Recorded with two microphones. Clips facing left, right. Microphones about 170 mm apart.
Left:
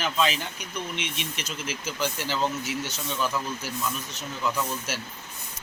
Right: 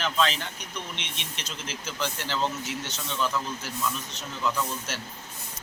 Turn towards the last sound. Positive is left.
turn(degrees=5)  # may be behind; listen again after turning